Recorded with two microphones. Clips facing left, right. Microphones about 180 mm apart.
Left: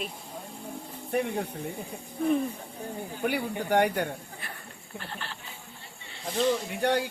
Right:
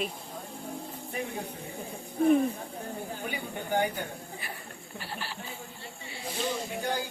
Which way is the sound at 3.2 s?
75° left (ahead or behind).